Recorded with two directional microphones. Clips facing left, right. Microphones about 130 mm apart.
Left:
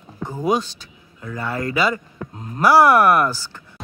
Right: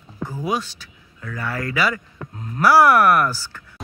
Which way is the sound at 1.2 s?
20° left (ahead or behind).